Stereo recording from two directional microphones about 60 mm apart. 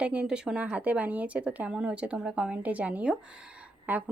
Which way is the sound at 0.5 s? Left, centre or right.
Right.